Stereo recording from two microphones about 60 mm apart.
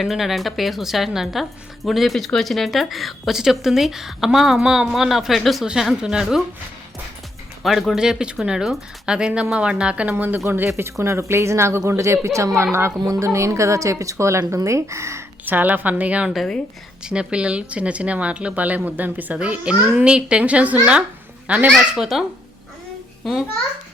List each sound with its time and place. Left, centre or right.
0.0 s a woman's voice: centre
5.6 s speech: centre
7.6 s speech: centre; by 10.4 s right
10.4 s speech: right
15.4 s a child's voice: right
21.8 s a woman's voice: centre
23.2 s a child's voice: centre